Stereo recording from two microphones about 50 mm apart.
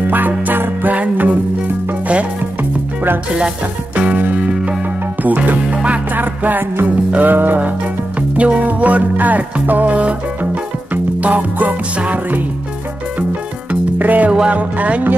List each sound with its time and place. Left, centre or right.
0.5 s music: right
3.9 s music: right
8.4 s music: right
13.7 s music: right
14.3 s music: centre
14.8 s music: right